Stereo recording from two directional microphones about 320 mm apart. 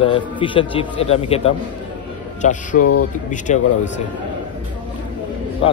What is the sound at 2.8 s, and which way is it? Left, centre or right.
Speech, left.